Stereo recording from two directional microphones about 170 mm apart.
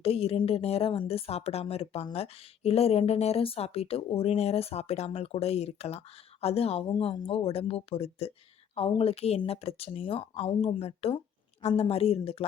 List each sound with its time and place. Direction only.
0.0 s a woman's voice: 35° left (ahead or behind)